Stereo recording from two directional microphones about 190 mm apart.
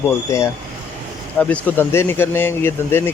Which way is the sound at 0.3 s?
15° left (ahead or behind).